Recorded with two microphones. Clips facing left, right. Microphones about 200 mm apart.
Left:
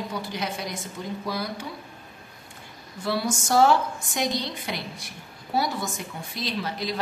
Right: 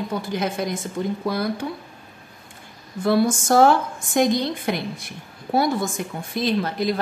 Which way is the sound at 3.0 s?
50° right (ahead or behind).